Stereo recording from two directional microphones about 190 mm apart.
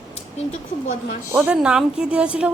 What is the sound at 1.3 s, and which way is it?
Speech, 10° right (ahead or behind).